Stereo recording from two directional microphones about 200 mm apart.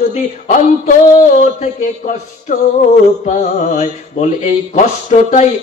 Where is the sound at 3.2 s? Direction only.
40° left (ahead or behind).